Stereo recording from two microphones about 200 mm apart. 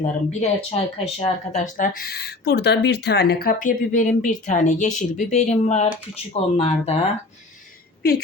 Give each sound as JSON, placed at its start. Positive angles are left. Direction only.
{"t": 0.3, "sound": "speech", "side_deg": 35}
{"t": 2.0, "sound": "speech", "side_deg": 50}